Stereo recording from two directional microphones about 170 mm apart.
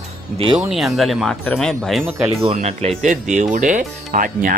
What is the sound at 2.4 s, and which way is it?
Speech, 40° right (ahead or behind).